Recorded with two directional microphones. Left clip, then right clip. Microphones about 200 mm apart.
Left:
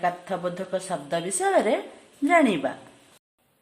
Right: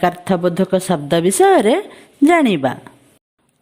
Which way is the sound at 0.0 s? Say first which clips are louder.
Right 10 dB; 45° right (ahead or behind).